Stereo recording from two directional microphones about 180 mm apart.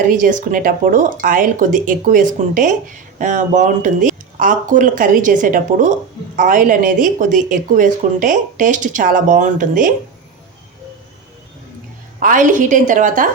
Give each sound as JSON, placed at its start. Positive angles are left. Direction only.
{"t": 0.1, "sound": "speech", "side_deg": -45}
{"t": 12.2, "sound": "speech", "side_deg": -45}